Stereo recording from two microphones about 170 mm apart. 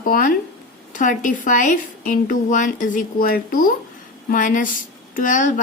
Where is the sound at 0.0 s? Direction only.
55° left (ahead or behind).